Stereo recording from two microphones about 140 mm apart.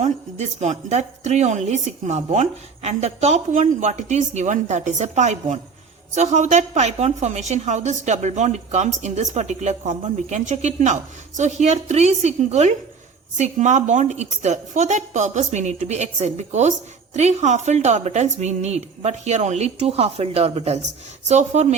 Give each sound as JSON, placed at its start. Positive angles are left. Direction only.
{"t": 0.0, "sound": "a woman's voice", "side_deg": -55}